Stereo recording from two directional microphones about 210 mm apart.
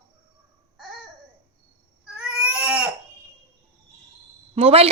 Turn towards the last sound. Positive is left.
turn(degrees=-25)  # may be behind; listen again after turning